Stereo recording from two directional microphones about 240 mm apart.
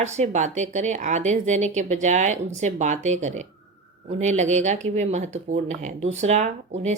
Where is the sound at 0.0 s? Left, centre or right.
Right.